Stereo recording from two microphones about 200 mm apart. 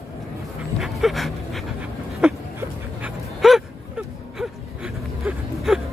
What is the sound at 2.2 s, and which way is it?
Dog, 5° right (ahead or behind).